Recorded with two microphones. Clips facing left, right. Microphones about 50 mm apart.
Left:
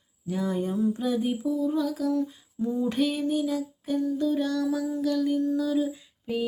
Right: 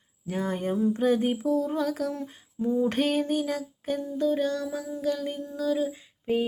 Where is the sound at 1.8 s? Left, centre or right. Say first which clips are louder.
Even; right.